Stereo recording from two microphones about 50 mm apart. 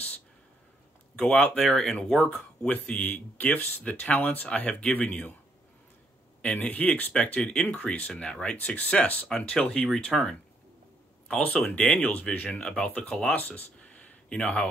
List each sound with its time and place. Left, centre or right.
1.1 s speech: centre
2.1 s speech: left
6.4 s speech: left
8.5 s speech: left
9.4 s speech: centre
12.4 s speech: centre
13.4 s a sound: left